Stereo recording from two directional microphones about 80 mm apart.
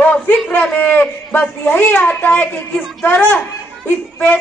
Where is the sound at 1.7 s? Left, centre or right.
Left.